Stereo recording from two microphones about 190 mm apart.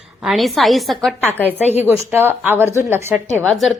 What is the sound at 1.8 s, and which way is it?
A woman's voice, 10° right (ahead or behind).